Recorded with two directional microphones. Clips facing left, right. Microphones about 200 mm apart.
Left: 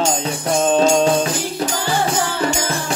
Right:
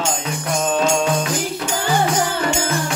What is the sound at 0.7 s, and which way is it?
Music, 35° left (ahead or behind).